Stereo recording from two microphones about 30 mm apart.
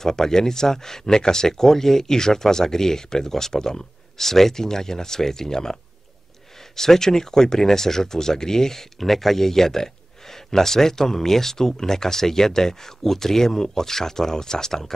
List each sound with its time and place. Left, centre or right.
0.0 s speech: centre
9.0 s speech: centre